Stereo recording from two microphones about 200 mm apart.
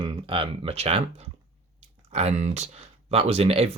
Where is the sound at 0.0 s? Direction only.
25° right (ahead or behind).